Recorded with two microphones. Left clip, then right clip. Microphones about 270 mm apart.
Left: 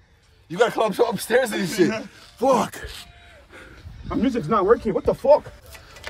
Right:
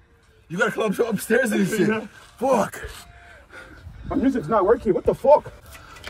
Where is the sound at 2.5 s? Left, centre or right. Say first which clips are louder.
Left 1 dB; centre.